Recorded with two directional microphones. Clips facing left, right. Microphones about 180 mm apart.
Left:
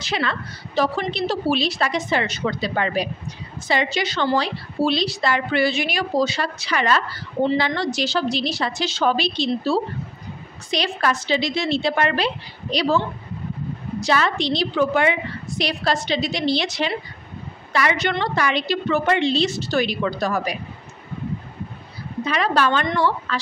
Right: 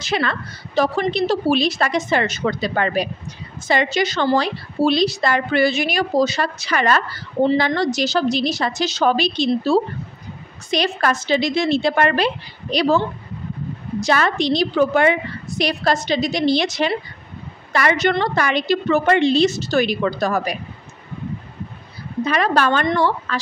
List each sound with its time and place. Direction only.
0.0 s a woman's voice: 50° right (ahead or behind)
14.0 s a woman's voice: 50° right (ahead or behind)
22.2 s a woman's voice: 45° right (ahead or behind)